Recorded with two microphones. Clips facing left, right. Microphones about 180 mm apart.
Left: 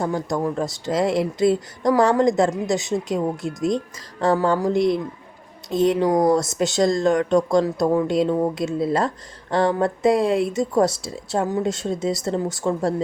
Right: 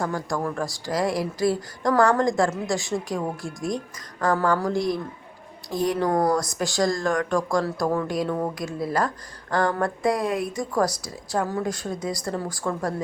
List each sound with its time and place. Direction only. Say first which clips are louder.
0.0 s speech: left 4 dB; 20° left (ahead or behind)